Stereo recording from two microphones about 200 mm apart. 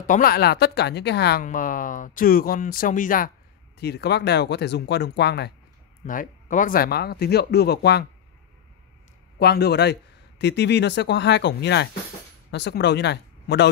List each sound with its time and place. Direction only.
0.0 s speech: 45° left (ahead or behind)
1.4 s speech: 40° left (ahead or behind)
3.8 s speech: 55° left (ahead or behind)
6.0 s speech: 40° left (ahead or behind)
9.4 s speech: 55° left (ahead or behind)